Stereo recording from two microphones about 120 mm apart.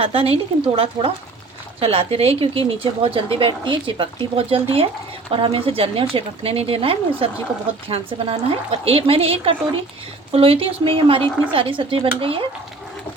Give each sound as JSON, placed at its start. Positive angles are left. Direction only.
{"t": 0.0, "sound": "a woman's voice", "side_deg": -50}